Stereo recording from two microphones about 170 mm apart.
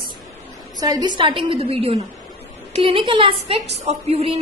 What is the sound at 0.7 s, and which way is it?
A woman's voice, 20° right (ahead or behind).